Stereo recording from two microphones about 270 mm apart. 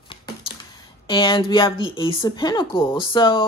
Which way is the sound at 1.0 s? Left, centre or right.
Centre.